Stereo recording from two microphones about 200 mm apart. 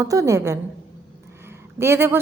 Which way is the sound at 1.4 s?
10° right (ahead or behind).